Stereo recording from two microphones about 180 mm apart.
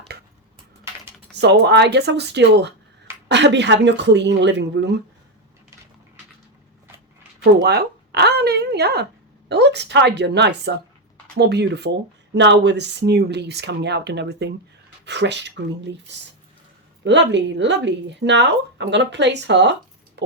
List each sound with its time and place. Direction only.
1.4 s speech: 70° right (ahead or behind)
7.3 s speech: 65° right (ahead or behind)
20.2 s a sound: 75° right (ahead or behind)